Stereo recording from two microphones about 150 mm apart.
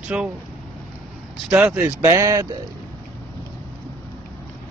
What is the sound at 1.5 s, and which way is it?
Speech, 15° right (ahead or behind).